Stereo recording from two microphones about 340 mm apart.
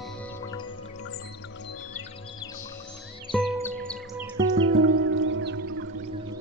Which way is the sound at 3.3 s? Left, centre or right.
Centre.